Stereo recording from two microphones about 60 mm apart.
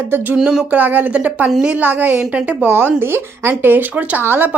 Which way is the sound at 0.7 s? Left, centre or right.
Right.